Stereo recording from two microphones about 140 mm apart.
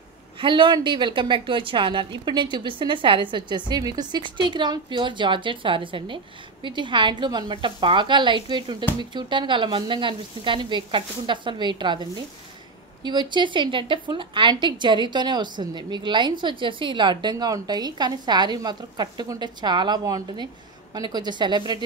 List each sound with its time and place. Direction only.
0.4 s a woman's voice: 35° right (ahead or behind)